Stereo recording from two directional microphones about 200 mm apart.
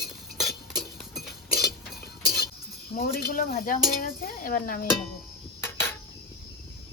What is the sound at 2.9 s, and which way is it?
Speech, 50° left (ahead or behind).